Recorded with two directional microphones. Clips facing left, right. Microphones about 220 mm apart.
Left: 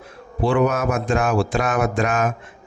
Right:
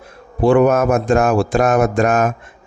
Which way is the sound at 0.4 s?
50° right (ahead or behind).